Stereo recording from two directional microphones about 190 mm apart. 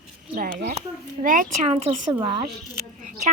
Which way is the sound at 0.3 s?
50° right (ahead or behind).